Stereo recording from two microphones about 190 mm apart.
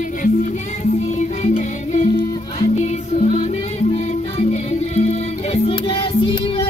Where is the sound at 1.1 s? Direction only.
40° left (ahead or behind).